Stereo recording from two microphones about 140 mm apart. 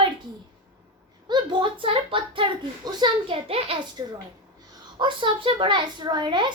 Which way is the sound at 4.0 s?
25° right (ahead or behind).